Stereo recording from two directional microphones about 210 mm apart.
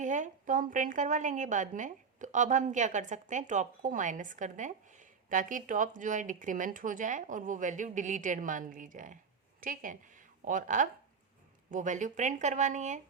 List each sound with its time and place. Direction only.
0.0 s a woman's voice: 35° right (ahead or behind)